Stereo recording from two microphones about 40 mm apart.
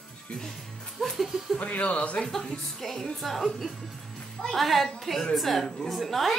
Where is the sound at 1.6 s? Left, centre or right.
Left.